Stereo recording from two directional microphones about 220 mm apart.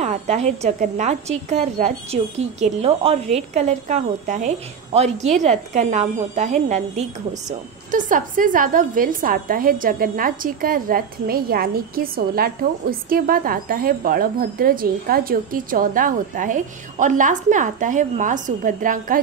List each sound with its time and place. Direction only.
0.0 s a woman's voice: 30° right (ahead or behind)